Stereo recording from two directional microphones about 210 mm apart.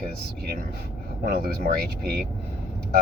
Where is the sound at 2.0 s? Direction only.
50° right (ahead or behind).